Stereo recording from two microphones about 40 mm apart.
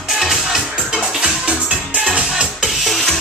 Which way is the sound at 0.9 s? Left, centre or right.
Right.